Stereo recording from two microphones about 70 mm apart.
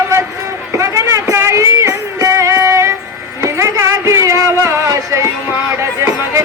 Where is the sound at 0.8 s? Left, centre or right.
Right.